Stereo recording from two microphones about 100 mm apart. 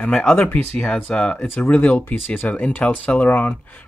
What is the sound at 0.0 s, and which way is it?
Speech, 10° left (ahead or behind).